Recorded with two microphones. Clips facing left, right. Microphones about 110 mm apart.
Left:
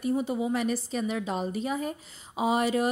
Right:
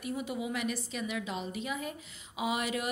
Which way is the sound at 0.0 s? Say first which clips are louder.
Left 8 dB; 35° left (ahead or behind).